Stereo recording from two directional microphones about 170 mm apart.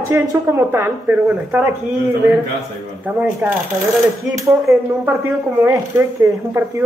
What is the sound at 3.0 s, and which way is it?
Speech, 10° right (ahead or behind).